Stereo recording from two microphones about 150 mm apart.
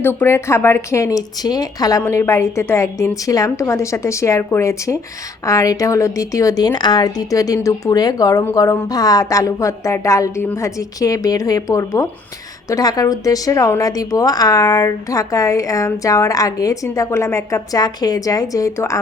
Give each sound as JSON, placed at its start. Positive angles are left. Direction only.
{"t": 0.0, "sound": "a woman's voice", "side_deg": 15}